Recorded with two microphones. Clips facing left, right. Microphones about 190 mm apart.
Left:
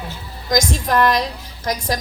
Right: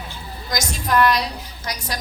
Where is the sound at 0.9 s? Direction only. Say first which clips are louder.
Even; 50° left (ahead or behind).